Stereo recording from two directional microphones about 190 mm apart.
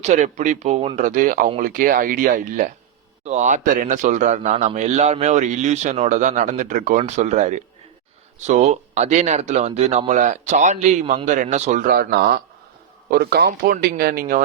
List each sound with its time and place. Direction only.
0.0 s a man's voice: 40° right (ahead or behind)